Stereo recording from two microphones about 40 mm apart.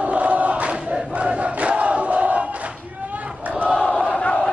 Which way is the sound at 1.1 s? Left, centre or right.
Right.